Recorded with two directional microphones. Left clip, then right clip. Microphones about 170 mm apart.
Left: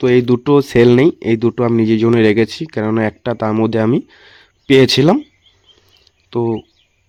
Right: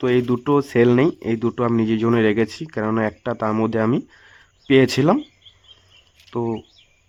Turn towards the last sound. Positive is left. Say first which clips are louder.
# left 7 dB
turn(degrees=30)  # may be behind; listen again after turning